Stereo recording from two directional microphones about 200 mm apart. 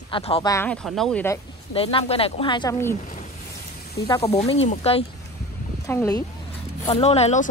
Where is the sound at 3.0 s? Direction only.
40° left (ahead or behind).